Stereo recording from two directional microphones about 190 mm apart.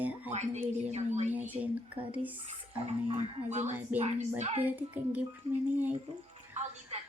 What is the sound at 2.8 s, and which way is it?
Speech, 35° right (ahead or behind).